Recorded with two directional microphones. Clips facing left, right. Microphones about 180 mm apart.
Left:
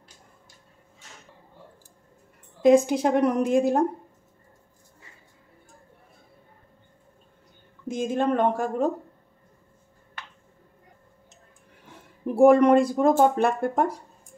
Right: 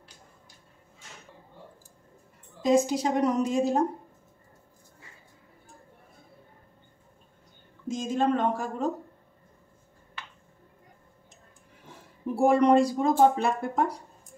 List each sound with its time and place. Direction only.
2.6 s a woman's voice: 60° left (ahead or behind)
7.9 s a woman's voice: 55° left (ahead or behind)
12.4 s speech: 55° left (ahead or behind)